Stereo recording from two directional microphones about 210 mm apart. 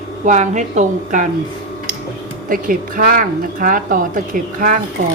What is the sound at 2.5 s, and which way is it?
Speech, 40° right (ahead or behind).